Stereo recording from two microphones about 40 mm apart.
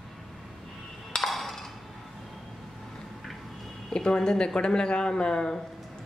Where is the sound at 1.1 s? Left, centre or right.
Centre.